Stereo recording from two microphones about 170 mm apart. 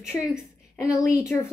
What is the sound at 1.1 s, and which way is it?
Speech, 15° left (ahead or behind).